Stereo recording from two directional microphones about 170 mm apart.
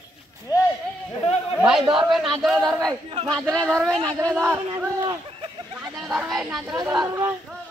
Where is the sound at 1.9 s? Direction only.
5° right (ahead or behind).